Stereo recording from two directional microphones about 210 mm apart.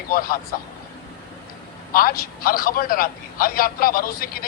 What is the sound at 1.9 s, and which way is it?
A man's voice, 45° left (ahead or behind).